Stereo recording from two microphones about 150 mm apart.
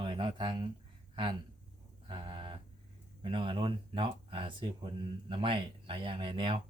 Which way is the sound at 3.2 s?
35° right (ahead or behind).